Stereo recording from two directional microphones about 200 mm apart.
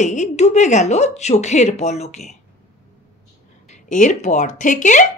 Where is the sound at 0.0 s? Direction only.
35° left (ahead or behind).